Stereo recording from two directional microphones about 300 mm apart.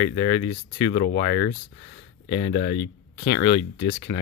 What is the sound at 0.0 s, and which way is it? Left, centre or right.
Speech, left.